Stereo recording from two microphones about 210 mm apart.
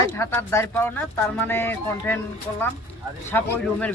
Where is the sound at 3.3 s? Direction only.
10° left (ahead or behind).